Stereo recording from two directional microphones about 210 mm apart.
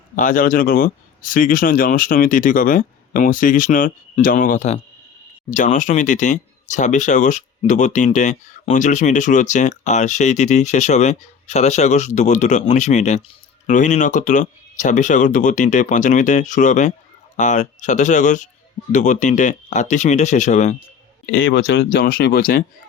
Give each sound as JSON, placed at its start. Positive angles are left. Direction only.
{"t": 0.2, "sound": "speech", "side_deg": 40}
{"t": 21.5, "sound": "speech", "side_deg": 60}